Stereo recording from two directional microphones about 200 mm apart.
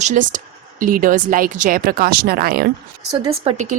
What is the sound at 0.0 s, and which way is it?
Speech, 40° right (ahead or behind).